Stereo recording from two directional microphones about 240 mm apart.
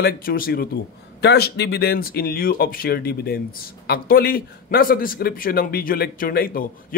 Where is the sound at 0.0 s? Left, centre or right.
Left.